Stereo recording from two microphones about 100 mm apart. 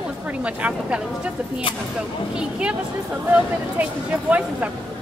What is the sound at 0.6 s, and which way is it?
Speech, 15° right (ahead or behind).